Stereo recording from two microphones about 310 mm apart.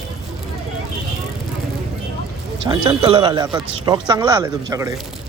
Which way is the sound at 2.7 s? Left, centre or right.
Centre.